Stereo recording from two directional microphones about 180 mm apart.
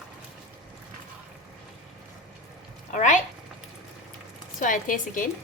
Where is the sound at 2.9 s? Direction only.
40° left (ahead or behind).